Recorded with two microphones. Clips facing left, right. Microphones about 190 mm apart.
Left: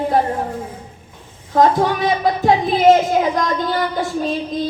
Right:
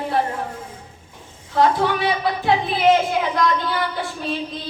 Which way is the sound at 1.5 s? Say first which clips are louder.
Left 3 dB; 45° left (ahead or behind).